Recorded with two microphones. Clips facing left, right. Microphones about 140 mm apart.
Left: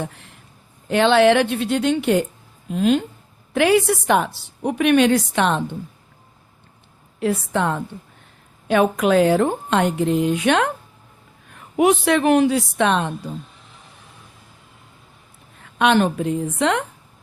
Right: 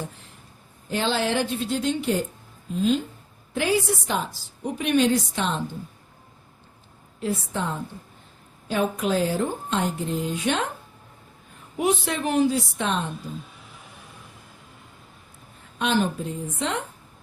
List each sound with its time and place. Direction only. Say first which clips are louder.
0.0 s a woman's voice: left 6 dB; 70° left (ahead or behind)
7.2 s a woman's voice: left 7 dB; 70° left (ahead or behind)
15.6 s a woman's voice: left 7 dB; 70° left (ahead or behind)